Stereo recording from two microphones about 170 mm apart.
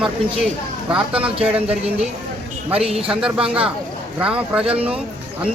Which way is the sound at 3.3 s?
30° right (ahead or behind).